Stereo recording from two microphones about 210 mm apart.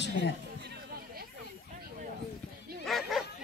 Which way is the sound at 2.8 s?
Centre (ahead or behind).